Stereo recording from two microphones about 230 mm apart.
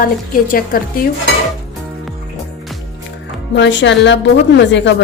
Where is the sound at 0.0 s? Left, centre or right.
Left.